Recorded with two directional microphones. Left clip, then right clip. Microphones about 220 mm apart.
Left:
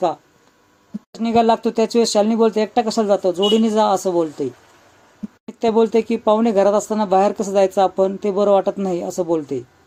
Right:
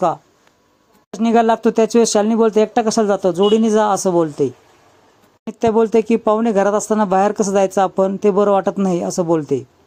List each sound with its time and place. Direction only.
1.2 s speech: 30° right (ahead or behind)
5.5 s speech: 30° right (ahead or behind)